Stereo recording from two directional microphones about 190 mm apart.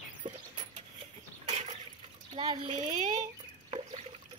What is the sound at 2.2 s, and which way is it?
Speech, 25° right (ahead or behind).